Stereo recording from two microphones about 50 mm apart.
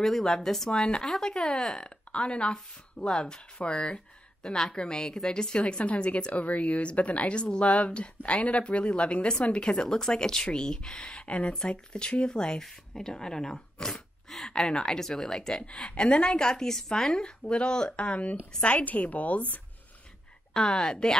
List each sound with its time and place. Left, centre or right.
0.0 s speech: centre
0.7 s a woman's voice: centre
1.0 s a woman's voice: centre; by 19.4 s left
20.5 s speech: centre